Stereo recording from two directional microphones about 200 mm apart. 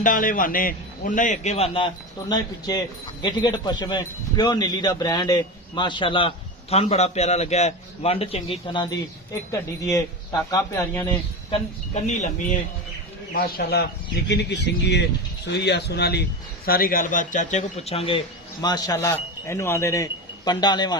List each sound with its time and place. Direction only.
0.0 s a man's voice: 40° left (ahead or behind); by 11.0 s 15° left (ahead or behind)
11.9 s a man's voice: 35° left (ahead or behind)
13.3 s a man's voice: 50° left (ahead or behind); by 21.0 s 20° left (ahead or behind)